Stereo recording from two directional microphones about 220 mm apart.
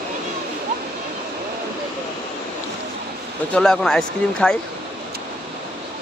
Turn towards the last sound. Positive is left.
turn(degrees=5)  # may be behind; listen again after turning